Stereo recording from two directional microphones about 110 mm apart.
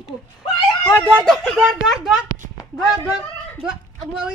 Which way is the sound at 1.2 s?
10° left (ahead or behind).